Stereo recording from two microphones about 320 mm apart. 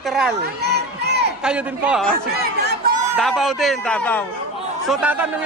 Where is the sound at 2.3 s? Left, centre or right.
Right.